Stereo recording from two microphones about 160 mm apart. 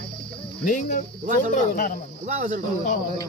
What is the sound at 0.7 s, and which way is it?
Speech, 55° left (ahead or behind).